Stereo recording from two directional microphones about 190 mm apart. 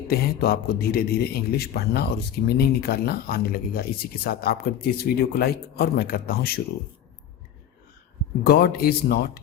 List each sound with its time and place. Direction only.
0.1 s speech: 55° left (ahead or behind)
8.4 s speech: 55° left (ahead or behind)